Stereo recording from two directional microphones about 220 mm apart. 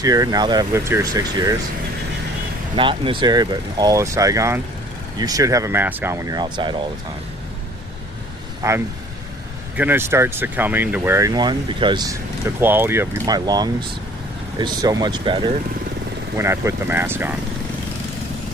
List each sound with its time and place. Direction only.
0.0 s speech: 15° right (ahead or behind)
2.7 s speech: 25° right (ahead or behind)
8.6 s speech: 15° right (ahead or behind)
12.5 s speech: 10° right (ahead or behind)